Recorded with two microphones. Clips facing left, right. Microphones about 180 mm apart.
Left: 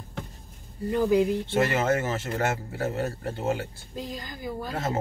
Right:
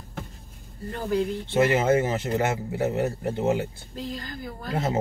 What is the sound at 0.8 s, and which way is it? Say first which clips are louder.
Speech: left 5 dB; 15° left (ahead or behind).